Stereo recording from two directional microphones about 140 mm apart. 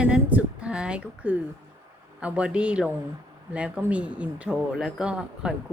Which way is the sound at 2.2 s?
10° right (ahead or behind).